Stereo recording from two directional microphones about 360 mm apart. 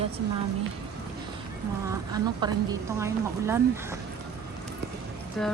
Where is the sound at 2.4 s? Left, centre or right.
Centre.